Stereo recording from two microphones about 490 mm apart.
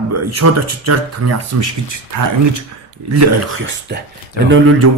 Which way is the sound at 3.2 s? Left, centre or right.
Right.